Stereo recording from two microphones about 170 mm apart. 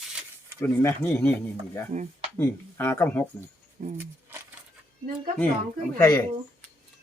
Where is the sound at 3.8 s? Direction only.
45° right (ahead or behind).